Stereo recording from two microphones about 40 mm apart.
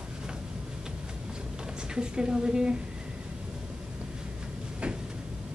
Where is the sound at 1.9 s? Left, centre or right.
Right.